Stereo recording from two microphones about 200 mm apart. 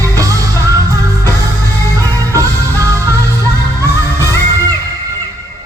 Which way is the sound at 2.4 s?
15° right (ahead or behind).